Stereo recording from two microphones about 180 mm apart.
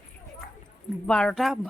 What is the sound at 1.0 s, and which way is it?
Speech, 5° left (ahead or behind).